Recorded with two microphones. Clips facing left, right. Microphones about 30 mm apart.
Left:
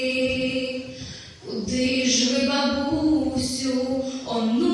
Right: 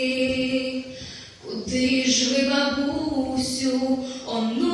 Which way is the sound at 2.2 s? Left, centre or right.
Centre.